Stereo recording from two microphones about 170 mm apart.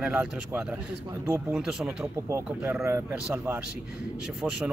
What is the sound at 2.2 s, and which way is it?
Speech, 15° right (ahead or behind).